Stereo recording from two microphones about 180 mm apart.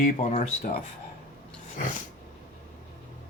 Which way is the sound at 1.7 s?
45° left (ahead or behind).